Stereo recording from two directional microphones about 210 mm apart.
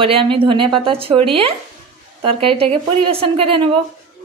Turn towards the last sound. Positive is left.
turn(degrees=-25)  # may be behind; listen again after turning